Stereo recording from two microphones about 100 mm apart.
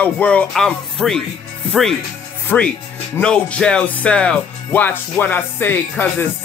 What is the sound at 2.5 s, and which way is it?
Speech, 15° left (ahead or behind).